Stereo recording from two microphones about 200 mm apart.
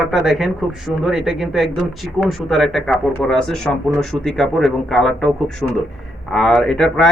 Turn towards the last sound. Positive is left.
turn(degrees=5)  # may be behind; listen again after turning